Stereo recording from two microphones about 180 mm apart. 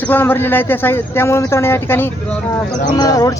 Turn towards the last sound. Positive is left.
turn(degrees=20)  # may be behind; listen again after turning